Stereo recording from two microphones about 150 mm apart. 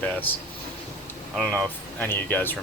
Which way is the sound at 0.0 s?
10° left (ahead or behind).